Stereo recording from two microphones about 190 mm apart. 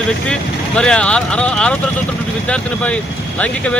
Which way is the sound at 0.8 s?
5° left (ahead or behind).